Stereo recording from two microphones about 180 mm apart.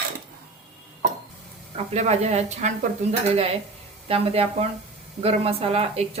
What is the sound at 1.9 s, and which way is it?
A woman's voice, 40° right (ahead or behind).